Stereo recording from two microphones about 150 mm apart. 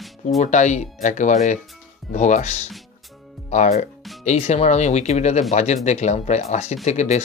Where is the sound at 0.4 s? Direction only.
50° left (ahead or behind).